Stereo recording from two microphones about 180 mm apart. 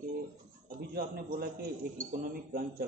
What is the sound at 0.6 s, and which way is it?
A man's voice, 55° right (ahead or behind).